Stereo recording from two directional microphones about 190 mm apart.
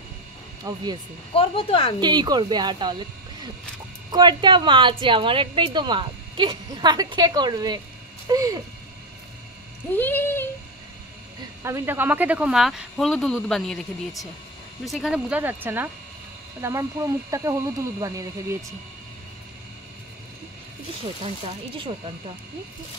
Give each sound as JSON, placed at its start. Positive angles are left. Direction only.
{"t": 0.7, "sound": "a woman's voice", "side_deg": -20}
{"t": 1.3, "sound": "speech", "side_deg": 30}
{"t": 2.0, "sound": "a woman's voice", "side_deg": -20}
{"t": 4.1, "sound": "a woman's voice", "side_deg": -25}
{"t": 9.8, "sound": "a sound", "side_deg": 10}
{"t": 11.6, "sound": "speech", "side_deg": -15}
{"t": 14.9, "sound": "speech", "side_deg": -5}
{"t": 21.0, "sound": "speech", "side_deg": -30}